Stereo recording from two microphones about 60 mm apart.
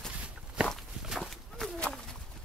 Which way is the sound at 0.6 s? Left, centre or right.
Centre.